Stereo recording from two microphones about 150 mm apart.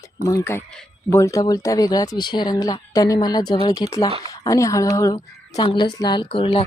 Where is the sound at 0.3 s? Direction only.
20° left (ahead or behind).